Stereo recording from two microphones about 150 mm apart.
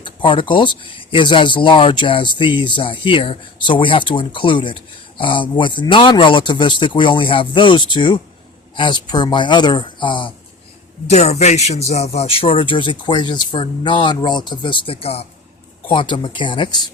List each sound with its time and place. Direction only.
0.0 s speech: 35° left (ahead or behind)
11.1 s speech: 45° left (ahead or behind); by 16.9 s 30° left (ahead or behind)